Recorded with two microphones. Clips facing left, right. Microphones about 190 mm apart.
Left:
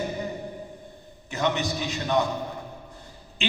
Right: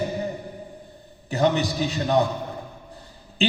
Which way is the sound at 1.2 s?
35° right (ahead or behind).